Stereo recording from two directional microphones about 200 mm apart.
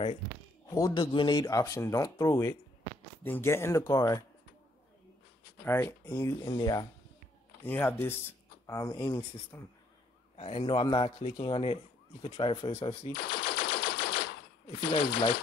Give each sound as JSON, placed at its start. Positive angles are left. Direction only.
{"t": 0.7, "sound": "speech", "side_deg": 20}
{"t": 5.7, "sound": "speech", "side_deg": 10}
{"t": 10.3, "sound": "speech", "side_deg": 30}
{"t": 13.1, "sound": "machine gun", "side_deg": 60}
{"t": 15.0, "sound": "speech", "side_deg": 60}